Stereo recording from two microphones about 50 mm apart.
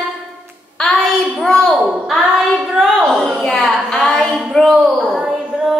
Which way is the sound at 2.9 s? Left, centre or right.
Centre.